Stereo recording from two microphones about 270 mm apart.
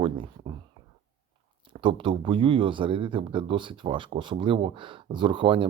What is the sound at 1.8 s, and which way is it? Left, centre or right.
Speech, centre.